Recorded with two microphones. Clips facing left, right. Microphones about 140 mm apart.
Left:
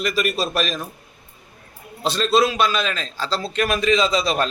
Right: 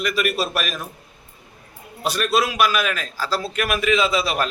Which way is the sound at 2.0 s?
25° left (ahead or behind).